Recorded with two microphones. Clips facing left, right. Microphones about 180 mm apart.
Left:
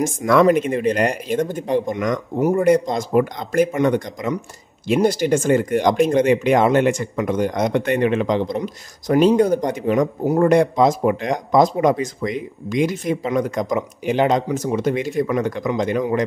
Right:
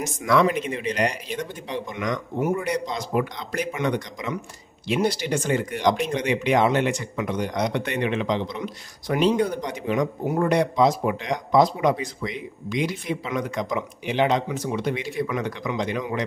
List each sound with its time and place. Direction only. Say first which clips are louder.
0.0 s speech: left 6 dB; 50° left (ahead or behind)